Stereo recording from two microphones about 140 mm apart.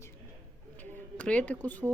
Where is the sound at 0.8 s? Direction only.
10° left (ahead or behind).